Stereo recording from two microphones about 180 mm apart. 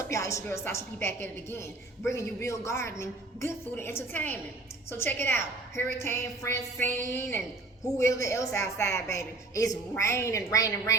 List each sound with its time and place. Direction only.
0.0 s speech: 15° left (ahead or behind)